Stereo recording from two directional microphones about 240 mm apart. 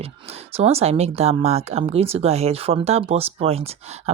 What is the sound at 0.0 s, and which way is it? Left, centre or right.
Speech, right.